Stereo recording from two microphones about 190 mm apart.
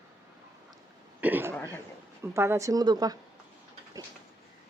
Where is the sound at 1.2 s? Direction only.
10° right (ahead or behind).